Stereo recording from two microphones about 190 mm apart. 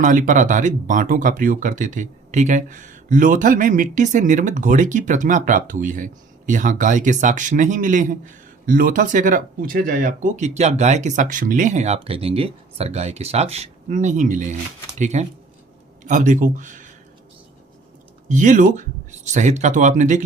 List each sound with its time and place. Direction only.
0.0 s speech: 40° right (ahead or behind)
18.3 s speech: 40° right (ahead or behind)